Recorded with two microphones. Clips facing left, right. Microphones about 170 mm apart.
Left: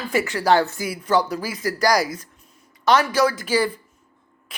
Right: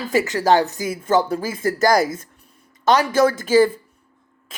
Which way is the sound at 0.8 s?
45° right (ahead or behind).